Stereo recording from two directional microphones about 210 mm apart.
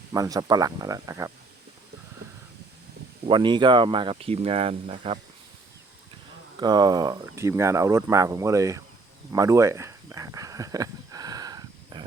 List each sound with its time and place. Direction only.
0.1 s speech: 15° right (ahead or behind)
3.2 s speech: 20° right (ahead or behind)
6.6 s speech: 20° right (ahead or behind)
9.3 s a sound: 15° right (ahead or behind)